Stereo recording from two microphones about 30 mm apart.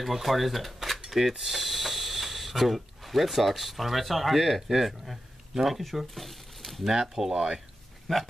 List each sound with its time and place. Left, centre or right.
0.0 s speech: centre
5.8 s speech: centre
7.3 s speech: right
8.1 s speech: centre